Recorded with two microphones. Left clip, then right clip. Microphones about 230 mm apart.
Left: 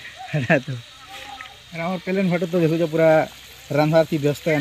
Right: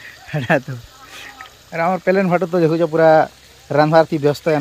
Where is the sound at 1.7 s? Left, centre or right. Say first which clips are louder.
Right 10 dB; right.